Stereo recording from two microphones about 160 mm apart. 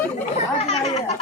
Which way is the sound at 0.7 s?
45° left (ahead or behind).